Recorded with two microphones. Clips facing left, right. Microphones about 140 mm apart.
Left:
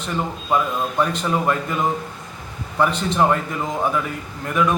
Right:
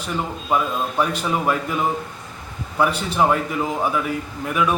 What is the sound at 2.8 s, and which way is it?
A man's voice, 5° right (ahead or behind).